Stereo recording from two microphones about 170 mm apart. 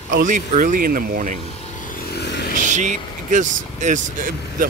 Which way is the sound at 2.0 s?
80° left.